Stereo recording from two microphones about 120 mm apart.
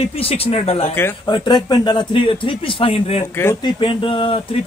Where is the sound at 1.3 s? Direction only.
35° left (ahead or behind).